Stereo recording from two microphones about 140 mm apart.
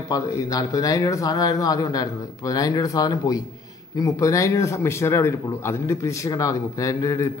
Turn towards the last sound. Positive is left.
turn(degrees=25)  # may be behind; listen again after turning